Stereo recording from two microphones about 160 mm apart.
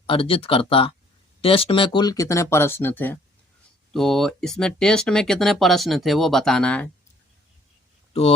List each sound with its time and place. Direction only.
0.1 s speech: 35° left (ahead or behind); by 3.2 s 10° left (ahead or behind)
3.9 s speech: centre (ahead or behind)